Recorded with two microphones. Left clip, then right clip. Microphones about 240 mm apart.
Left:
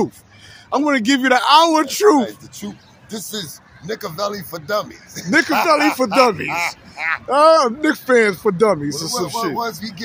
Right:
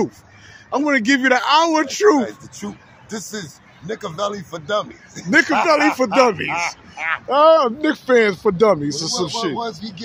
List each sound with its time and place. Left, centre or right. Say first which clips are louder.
0.7 s a man's voice: even; centre
9.7 s speech: left 2 dB; centre